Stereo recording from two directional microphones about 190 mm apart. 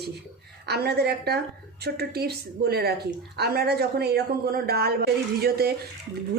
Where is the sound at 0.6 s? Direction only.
60° right (ahead or behind).